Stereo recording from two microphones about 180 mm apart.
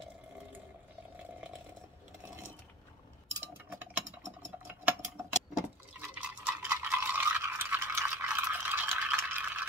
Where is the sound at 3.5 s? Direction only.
10° right (ahead or behind).